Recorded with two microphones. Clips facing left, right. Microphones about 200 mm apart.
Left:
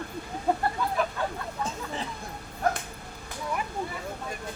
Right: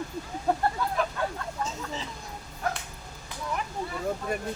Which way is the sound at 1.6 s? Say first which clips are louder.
Left 3 dB; 55° left (ahead or behind).